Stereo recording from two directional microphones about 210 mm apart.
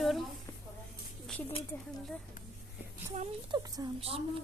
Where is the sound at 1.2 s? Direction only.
5° left (ahead or behind).